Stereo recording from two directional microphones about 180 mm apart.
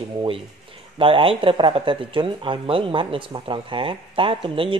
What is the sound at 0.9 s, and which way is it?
Speech, 30° right (ahead or behind).